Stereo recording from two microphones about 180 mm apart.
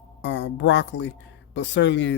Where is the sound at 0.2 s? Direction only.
80° left.